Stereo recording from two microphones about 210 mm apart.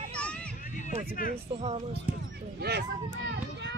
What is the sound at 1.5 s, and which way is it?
Speech, 30° right (ahead or behind).